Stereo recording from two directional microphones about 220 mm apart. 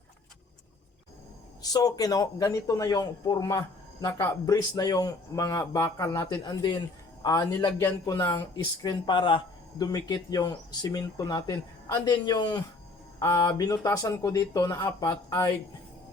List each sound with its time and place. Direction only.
1.6 s a man's voice: 15° left (ahead or behind)